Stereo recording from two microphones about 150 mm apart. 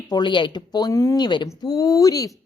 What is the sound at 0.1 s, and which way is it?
Speech, 30° left (ahead or behind).